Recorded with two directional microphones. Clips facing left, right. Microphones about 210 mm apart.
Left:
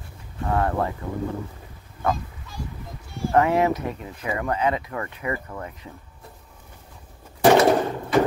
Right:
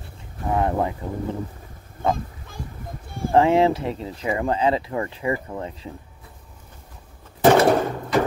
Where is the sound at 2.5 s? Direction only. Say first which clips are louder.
Left 1 dB; 55° right (ahead or behind).